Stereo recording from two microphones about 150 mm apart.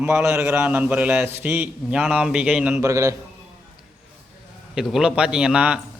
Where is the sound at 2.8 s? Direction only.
20° right (ahead or behind).